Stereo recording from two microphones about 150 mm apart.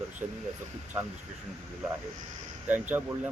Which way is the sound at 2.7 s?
10° right (ahead or behind).